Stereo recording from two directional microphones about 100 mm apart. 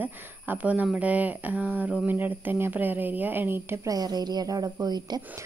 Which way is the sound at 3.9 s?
40° right (ahead or behind).